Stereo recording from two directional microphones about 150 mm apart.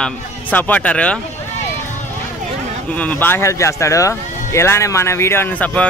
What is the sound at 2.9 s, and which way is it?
Speech, 10° left (ahead or behind).